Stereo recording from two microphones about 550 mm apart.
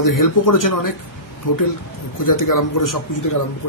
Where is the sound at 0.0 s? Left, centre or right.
Left.